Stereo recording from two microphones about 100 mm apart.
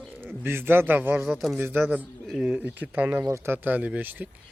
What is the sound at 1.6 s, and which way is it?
A man's voice, 20° right (ahead or behind).